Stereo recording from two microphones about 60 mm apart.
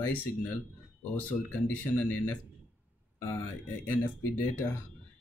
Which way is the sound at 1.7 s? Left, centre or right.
Left.